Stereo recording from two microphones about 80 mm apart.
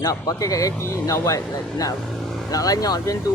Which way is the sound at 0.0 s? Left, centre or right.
Left.